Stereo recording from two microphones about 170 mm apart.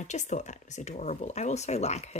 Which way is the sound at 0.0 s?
45° left (ahead or behind).